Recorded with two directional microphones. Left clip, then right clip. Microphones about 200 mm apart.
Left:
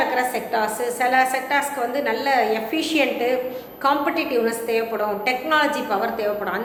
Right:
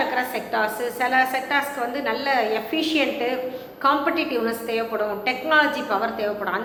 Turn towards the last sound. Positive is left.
turn(degrees=20)  # may be behind; listen again after turning